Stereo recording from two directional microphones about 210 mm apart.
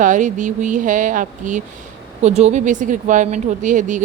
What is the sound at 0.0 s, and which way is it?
Speech, 35° right (ahead or behind).